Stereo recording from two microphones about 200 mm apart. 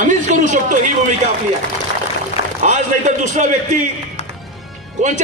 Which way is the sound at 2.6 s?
35° right (ahead or behind).